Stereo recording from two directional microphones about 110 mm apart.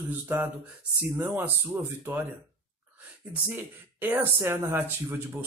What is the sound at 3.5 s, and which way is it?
A man's voice, 15° right (ahead or behind).